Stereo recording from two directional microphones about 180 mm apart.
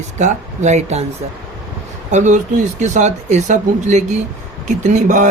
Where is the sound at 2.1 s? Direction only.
40° right (ahead or behind).